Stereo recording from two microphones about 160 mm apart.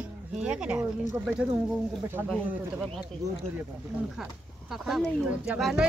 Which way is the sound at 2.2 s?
15° right (ahead or behind).